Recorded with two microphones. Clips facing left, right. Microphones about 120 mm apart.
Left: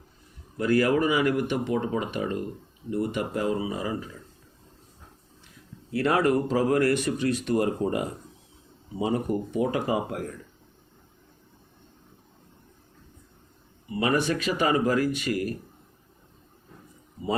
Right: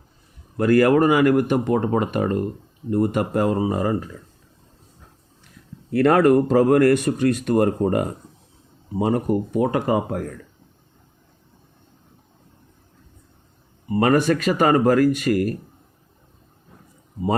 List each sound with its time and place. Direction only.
0.5 s speech: 55° right (ahead or behind)
5.9 s speech: 50° right (ahead or behind)
13.8 s speech: 45° right (ahead or behind)